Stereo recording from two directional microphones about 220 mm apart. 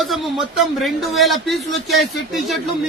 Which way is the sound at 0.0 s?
Centre (ahead or behind).